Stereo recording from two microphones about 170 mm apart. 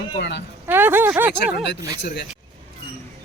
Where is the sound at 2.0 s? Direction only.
90° left.